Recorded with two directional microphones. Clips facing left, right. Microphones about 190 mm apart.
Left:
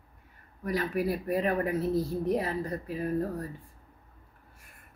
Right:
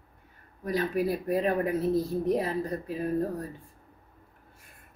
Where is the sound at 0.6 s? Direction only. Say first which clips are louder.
Right 2 dB; 25° right (ahead or behind).